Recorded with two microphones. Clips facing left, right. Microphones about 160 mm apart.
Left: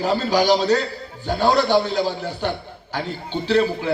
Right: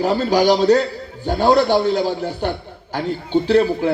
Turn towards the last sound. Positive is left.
turn(degrees=-50)  # may be behind; listen again after turning